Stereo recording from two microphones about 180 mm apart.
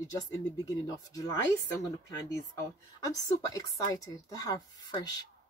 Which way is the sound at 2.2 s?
15° left (ahead or behind).